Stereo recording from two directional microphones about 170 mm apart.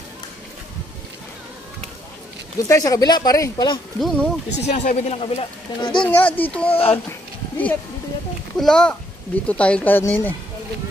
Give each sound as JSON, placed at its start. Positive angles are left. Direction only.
{"t": 2.7, "sound": "speech", "side_deg": 20}
{"t": 4.0, "sound": "speech", "side_deg": 5}
{"t": 4.6, "sound": "speech", "side_deg": 45}
{"t": 6.1, "sound": "speech", "side_deg": 10}
{"t": 6.7, "sound": "speech", "side_deg": 35}
{"t": 7.1, "sound": "a sound", "side_deg": 10}
{"t": 8.5, "sound": "a child's voice", "side_deg": 5}